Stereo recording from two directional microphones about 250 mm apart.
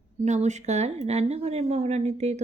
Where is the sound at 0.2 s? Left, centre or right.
Right.